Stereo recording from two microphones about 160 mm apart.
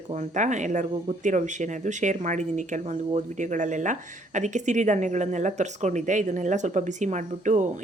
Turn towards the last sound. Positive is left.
turn(degrees=-50)  # may be behind; listen again after turning